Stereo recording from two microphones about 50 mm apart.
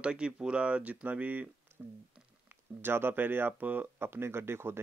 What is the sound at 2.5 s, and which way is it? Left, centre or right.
Speech, right.